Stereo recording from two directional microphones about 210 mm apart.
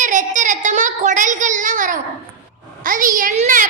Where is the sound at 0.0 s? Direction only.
35° right (ahead or behind).